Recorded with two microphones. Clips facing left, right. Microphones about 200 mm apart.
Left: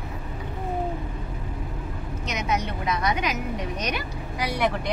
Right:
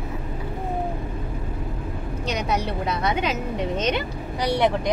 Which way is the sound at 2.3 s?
35° right (ahead or behind).